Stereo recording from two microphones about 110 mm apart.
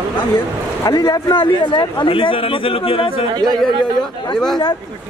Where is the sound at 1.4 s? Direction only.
50° left (ahead or behind).